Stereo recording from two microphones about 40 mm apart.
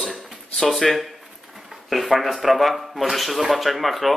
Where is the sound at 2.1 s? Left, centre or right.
Centre.